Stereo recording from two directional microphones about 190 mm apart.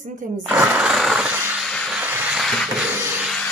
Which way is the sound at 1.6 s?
Centre (ahead or behind).